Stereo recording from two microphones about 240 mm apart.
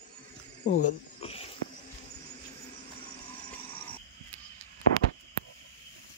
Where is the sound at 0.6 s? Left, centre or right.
Left.